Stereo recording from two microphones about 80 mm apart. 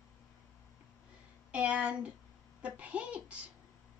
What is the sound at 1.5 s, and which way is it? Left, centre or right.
A woman's voice, centre.